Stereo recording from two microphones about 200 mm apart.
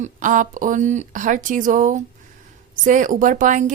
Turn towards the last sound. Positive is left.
turn(degrees=-40)  # may be behind; listen again after turning